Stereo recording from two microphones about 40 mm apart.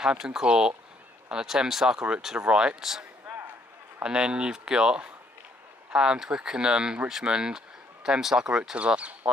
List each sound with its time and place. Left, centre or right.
0.2 s a man's voice: centre
2.8 s a man's voice: centre
8.7 s speech: right